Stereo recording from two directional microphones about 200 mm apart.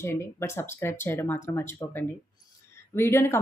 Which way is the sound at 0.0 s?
10° left (ahead or behind).